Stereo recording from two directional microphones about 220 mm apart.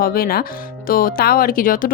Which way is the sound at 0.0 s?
40° left (ahead or behind).